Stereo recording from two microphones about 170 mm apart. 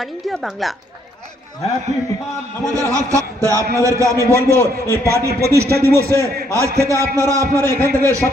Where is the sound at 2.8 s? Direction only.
20° right (ahead or behind).